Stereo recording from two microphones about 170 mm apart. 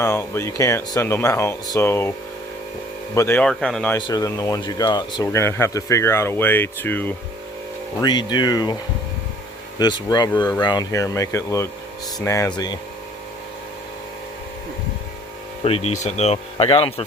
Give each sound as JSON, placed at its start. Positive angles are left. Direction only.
{"t": 0.0, "sound": "speech", "side_deg": 15}
{"t": 3.2, "sound": "speech", "side_deg": 10}
{"t": 3.9, "sound": "speech", "side_deg": 25}
{"t": 8.0, "sound": "speech", "side_deg": 25}
{"t": 15.6, "sound": "speech", "side_deg": 35}